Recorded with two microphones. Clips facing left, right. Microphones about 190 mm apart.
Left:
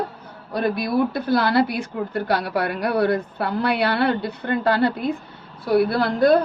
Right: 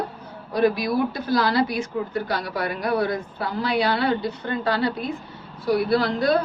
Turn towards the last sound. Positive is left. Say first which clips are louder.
# left 3 dB
turn(degrees=55)  # may be behind; listen again after turning